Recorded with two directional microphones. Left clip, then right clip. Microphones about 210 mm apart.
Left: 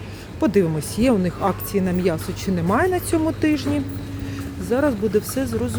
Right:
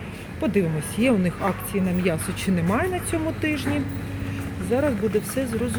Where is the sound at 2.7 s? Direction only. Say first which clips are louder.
Left 7 dB; 25° left (ahead or behind).